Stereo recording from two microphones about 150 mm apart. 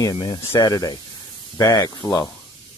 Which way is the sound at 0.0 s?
35° left (ahead or behind).